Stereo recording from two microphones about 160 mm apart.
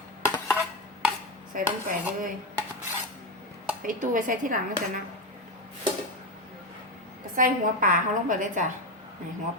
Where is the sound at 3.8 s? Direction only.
55° right (ahead or behind).